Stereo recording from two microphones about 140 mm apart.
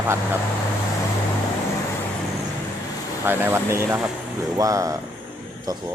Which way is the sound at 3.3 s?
15° right (ahead or behind).